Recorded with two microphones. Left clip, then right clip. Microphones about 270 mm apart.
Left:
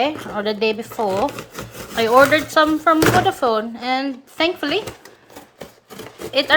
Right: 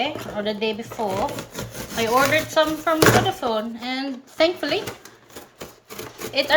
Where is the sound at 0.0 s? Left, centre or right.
Centre.